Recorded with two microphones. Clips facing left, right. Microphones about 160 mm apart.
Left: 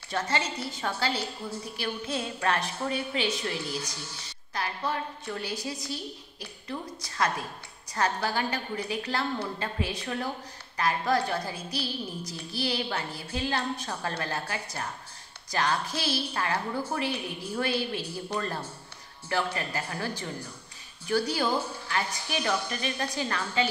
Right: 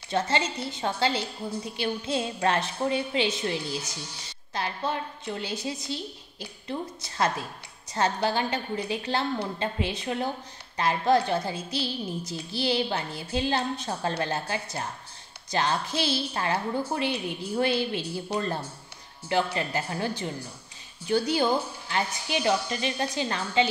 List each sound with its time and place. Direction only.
0.1 s a woman's voice: 25° right (ahead or behind)
19.2 s a woman's voice: 25° right (ahead or behind)